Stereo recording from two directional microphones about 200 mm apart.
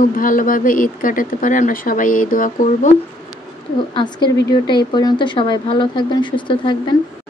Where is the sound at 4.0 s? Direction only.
25° left (ahead or behind).